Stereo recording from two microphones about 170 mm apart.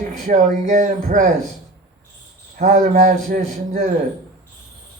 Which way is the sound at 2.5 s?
50° right (ahead or behind).